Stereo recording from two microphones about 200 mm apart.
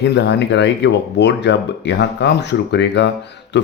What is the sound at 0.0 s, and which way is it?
Speech, 60° left (ahead or behind).